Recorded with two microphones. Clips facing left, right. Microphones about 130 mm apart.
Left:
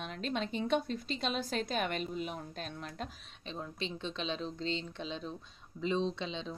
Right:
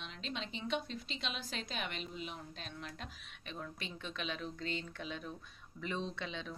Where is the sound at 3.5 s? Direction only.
25° left (ahead or behind).